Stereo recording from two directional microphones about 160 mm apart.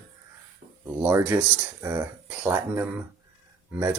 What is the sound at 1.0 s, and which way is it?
Speech, 10° right (ahead or behind).